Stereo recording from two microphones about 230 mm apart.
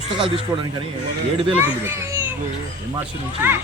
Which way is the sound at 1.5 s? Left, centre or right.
Centre.